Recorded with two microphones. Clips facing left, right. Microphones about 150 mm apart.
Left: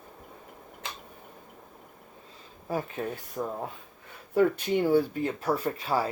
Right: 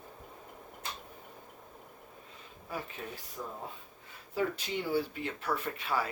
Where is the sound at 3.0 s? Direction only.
55° left (ahead or behind).